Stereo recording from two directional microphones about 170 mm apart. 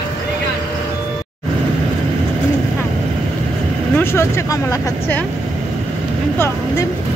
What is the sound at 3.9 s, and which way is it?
Speech, 15° left (ahead or behind).